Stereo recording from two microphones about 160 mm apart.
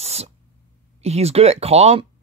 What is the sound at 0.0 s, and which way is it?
Spray, 40° right (ahead or behind).